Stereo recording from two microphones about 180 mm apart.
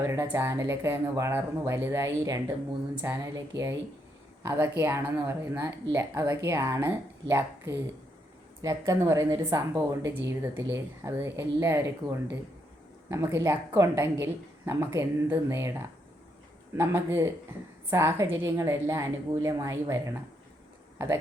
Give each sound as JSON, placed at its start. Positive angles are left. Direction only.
{"t": 0.0, "sound": "a woman's voice", "side_deg": -15}
{"t": 4.4, "sound": "a woman's voice", "side_deg": -15}
{"t": 16.7, "sound": "a woman's voice", "side_deg": -15}